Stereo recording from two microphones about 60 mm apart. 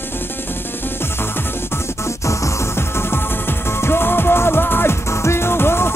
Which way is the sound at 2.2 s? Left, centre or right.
Left.